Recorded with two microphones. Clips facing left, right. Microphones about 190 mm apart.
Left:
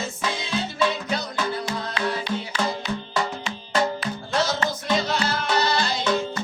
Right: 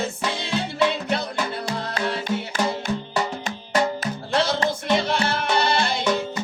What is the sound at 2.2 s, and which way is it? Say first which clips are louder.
Music: right 2 dB; 50° right (ahead or behind).